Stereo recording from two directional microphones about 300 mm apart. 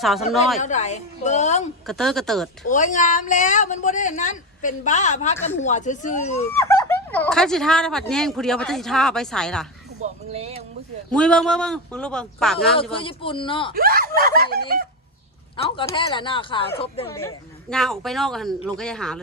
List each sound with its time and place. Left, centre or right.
0.6 s a woman's voice: left
1.9 s speech: centre
2.6 s a woman's voice: left
6.6 s speech: centre
10.0 s speech: right
11.1 s speech: centre
13.0 s speech: centre
13.7 s speech: right
15.5 s speech: centre
17.2 s speech: centre